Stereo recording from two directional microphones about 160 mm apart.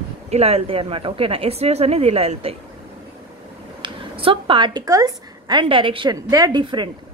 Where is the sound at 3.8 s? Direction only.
35° right (ahead or behind).